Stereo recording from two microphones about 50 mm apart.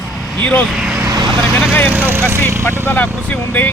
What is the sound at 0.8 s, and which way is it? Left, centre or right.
Vehicle, centre.